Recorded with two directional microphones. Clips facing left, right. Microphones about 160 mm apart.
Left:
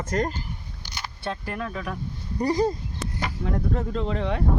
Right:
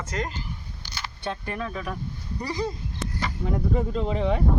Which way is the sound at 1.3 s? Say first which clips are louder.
Even; centre (ahead or behind).